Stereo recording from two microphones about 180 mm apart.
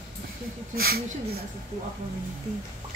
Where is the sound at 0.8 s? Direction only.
60° right (ahead or behind).